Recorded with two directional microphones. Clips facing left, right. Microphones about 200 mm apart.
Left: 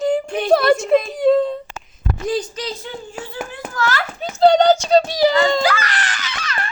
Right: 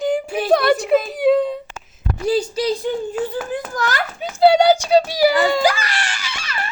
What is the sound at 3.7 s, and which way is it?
A child's voice, 15° right (ahead or behind).